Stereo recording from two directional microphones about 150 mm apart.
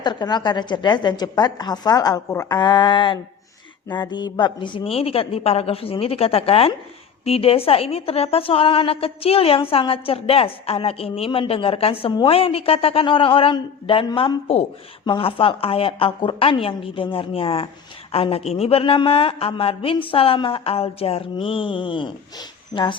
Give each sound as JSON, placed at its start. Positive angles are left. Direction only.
{"t": 0.0, "sound": "a woman's voice", "side_deg": 30}